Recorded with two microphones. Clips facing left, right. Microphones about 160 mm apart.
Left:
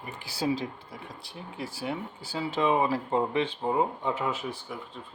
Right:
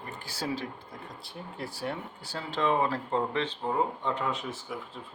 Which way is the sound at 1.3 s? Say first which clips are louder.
Left 1 dB; centre (ahead or behind).